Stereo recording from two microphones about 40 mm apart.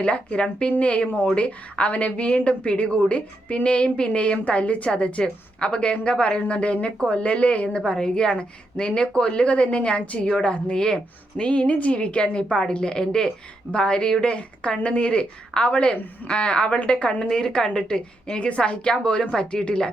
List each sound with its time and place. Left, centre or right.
0.0 s a woman's voice: left
7.8 s a woman's voice: left
10.8 s a woman's voice: centre